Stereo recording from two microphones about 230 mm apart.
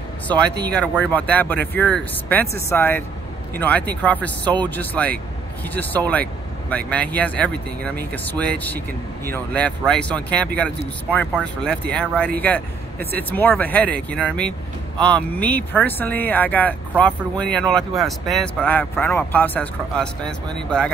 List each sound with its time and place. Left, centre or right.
0.5 s speech: right
0.7 s speech: centre
11.9 s speech: centre